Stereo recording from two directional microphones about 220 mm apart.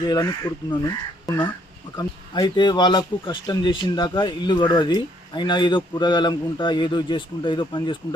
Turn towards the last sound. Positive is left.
turn(degrees=20)  # may be behind; listen again after turning